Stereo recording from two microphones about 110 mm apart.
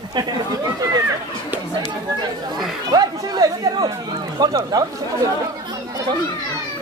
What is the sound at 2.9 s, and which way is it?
Speech, 35° right (ahead or behind).